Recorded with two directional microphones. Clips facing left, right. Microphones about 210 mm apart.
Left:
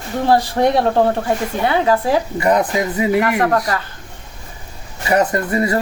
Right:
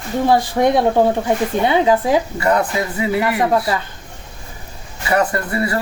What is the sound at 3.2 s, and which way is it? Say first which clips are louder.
Speech: even; 10° right (ahead or behind).